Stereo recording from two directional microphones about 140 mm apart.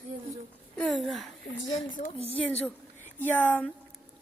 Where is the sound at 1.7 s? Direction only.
65° left (ahead or behind).